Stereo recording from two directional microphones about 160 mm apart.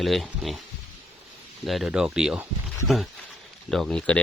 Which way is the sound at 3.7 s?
5° left (ahead or behind).